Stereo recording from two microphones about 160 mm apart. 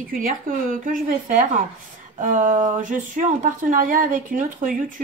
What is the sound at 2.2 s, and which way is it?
Speech, 55° right (ahead or behind).